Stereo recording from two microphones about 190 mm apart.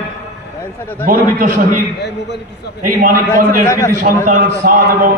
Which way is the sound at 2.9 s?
45° right (ahead or behind).